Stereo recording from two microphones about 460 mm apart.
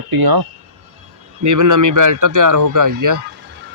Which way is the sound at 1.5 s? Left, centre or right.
Right.